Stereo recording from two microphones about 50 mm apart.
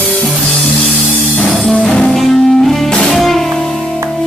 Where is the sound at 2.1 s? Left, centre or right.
Centre.